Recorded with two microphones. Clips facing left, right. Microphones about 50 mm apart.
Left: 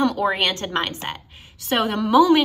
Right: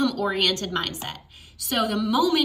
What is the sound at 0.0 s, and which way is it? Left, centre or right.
A woman's voice, left.